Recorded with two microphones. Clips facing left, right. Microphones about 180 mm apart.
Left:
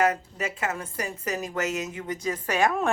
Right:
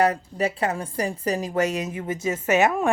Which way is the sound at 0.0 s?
35° right (ahead or behind).